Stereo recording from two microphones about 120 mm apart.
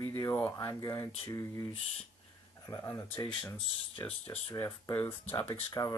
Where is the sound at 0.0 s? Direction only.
25° left (ahead or behind).